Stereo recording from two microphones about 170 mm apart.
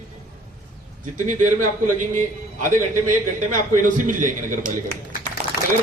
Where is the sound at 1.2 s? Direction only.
50° right (ahead or behind).